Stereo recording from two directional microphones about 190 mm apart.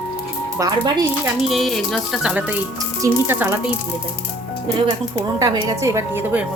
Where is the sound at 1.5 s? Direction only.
Centre (ahead or behind).